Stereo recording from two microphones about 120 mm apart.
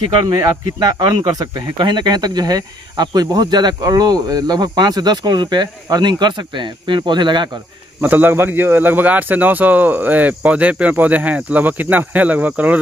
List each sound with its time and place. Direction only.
0.2 s speech: 35° right (ahead or behind)
8.0 s a man's voice: 15° right (ahead or behind)